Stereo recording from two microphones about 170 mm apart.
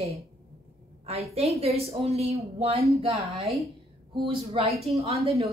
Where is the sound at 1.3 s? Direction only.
35° right (ahead or behind).